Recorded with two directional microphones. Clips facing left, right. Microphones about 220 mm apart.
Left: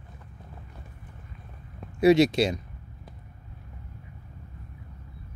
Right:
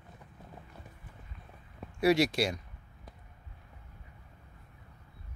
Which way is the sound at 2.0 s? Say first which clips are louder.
Left 7 dB; 20° left (ahead or behind).